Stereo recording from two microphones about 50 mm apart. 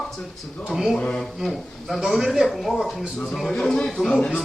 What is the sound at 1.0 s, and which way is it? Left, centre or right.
Speech, left.